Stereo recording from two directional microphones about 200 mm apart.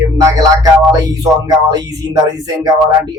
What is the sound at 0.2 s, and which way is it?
Speech, 15° right (ahead or behind).